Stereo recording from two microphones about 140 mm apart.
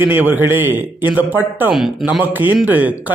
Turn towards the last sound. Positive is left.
turn(degrees=-10)  # may be behind; listen again after turning